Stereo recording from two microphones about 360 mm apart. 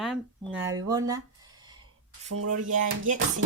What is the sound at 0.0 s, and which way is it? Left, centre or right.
Speech, centre.